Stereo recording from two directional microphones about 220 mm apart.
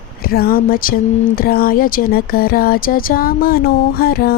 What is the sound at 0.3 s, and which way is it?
Speech, 40° left (ahead or behind).